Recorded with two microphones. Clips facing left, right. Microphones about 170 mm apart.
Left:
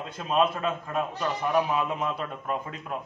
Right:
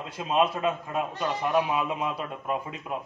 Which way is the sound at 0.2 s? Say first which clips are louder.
Even; 15° right (ahead or behind).